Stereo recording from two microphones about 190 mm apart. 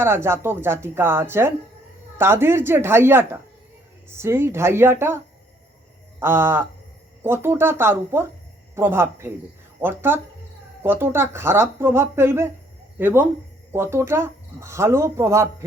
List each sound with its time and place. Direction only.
0.0 s speech: 15° right (ahead or behind)